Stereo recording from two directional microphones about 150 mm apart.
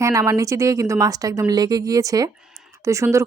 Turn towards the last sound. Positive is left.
turn(degrees=-20)  # may be behind; listen again after turning